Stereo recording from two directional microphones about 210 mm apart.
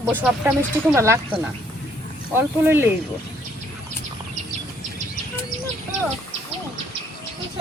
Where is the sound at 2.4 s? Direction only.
10° right (ahead or behind).